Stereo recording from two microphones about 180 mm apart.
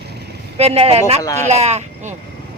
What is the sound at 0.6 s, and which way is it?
Speech, 35° right (ahead or behind).